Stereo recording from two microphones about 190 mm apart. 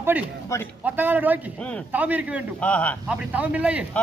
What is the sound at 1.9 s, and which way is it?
Speech, 10° right (ahead or behind).